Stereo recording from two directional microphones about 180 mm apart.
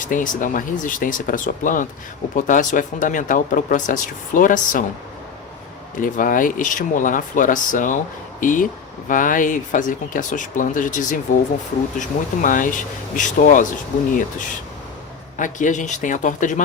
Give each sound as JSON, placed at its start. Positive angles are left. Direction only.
{"t": 0.0, "sound": "speech", "side_deg": 45}
{"t": 6.0, "sound": "speech", "side_deg": 50}